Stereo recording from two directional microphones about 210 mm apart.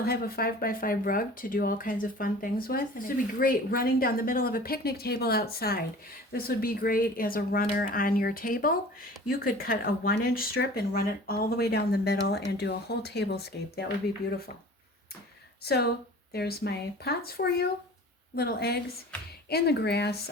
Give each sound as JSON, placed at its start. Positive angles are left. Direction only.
{"t": 0.0, "sound": "speech", "side_deg": 45}
{"t": 15.6, "sound": "speech", "side_deg": 50}